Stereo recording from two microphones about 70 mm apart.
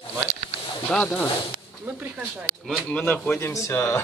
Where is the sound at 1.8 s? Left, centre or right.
Right.